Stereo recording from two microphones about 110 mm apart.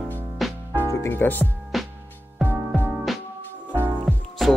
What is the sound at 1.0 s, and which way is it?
Speech, 20° left (ahead or behind).